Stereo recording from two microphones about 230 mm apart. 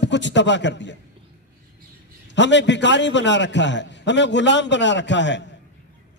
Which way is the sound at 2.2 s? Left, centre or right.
Left.